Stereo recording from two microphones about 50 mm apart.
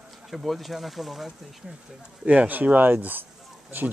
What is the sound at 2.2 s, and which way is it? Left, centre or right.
Speech, right.